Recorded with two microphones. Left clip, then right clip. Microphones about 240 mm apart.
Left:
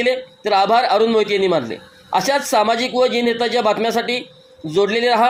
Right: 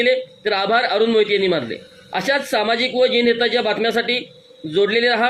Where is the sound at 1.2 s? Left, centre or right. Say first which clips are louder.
Even; centre.